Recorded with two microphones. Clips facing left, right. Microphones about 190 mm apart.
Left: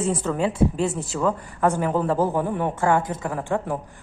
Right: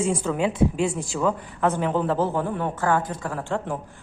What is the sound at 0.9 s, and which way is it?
A woman's voice, 5° left (ahead or behind).